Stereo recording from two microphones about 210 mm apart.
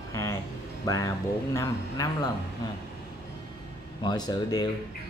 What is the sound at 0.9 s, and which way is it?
Speech, 15° left (ahead or behind).